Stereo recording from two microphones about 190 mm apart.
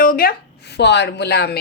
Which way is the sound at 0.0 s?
50° left (ahead or behind).